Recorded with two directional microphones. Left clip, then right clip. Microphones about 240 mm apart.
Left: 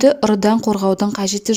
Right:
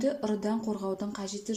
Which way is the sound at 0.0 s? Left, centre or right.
Left.